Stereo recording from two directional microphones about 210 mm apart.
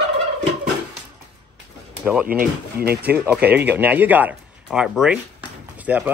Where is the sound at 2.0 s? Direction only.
5° right (ahead or behind).